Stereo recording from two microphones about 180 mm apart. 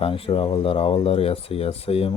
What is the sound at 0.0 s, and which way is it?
Speech, 30° left (ahead or behind).